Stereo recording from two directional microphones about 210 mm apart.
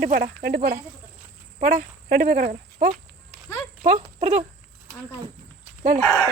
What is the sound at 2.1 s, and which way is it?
Speech, 50° right (ahead or behind).